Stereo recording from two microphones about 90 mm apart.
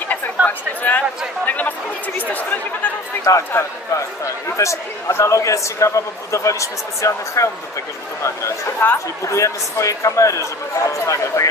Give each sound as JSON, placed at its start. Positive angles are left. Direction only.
{"t": 0.5, "sound": "speech", "side_deg": 20}
{"t": 2.1, "sound": "chatter", "side_deg": 20}
{"t": 3.3, "sound": "a man's voice", "side_deg": 35}
{"t": 8.8, "sound": "a man's voice", "side_deg": 30}